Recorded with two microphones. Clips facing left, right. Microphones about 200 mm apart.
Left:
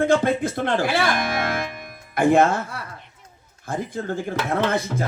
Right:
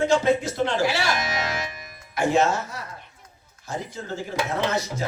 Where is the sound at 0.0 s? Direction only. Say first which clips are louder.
Left 1 dB; 55° left (ahead or behind).